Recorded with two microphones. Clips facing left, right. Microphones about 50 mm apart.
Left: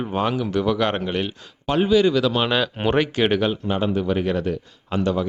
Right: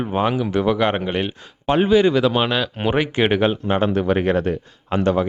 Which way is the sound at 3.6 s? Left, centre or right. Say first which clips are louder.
Right 3 dB; right.